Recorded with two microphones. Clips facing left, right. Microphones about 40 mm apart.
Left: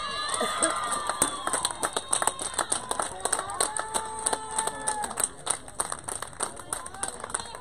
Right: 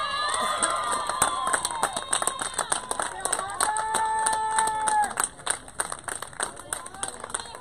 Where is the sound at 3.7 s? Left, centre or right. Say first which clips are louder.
Right 7 dB; right.